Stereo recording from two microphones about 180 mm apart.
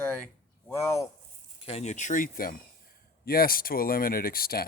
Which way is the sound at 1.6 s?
35° left (ahead or behind).